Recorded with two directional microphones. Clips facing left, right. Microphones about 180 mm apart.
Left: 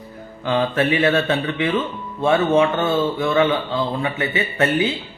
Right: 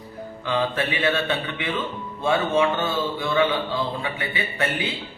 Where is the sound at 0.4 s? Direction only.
50° left (ahead or behind).